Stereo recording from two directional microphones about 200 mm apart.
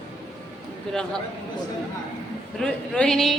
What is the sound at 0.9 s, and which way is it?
Speech, 5° left (ahead or behind).